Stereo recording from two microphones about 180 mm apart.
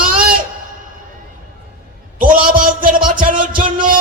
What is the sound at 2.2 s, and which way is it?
Speech, 50° right (ahead or behind).